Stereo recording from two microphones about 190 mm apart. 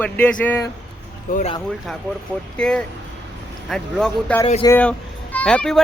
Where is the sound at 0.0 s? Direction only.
10° left (ahead or behind).